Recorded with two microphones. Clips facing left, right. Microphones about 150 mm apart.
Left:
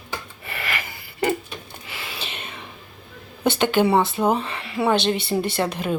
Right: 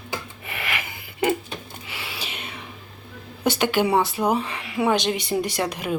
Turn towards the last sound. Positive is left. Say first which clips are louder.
# left 2 dB
turn(degrees=-10)  # may be behind; listen again after turning